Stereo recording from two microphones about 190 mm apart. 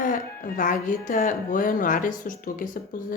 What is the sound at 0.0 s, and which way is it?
A woman's voice, 45° left (ahead or behind).